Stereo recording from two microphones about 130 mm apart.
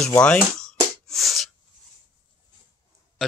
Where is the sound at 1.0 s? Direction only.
Centre (ahead or behind).